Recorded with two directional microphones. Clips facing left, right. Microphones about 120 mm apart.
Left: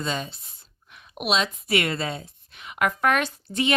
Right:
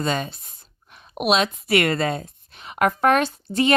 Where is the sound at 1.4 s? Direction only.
60° right (ahead or behind).